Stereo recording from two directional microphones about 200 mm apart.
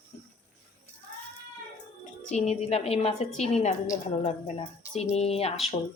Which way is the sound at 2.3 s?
30° left (ahead or behind).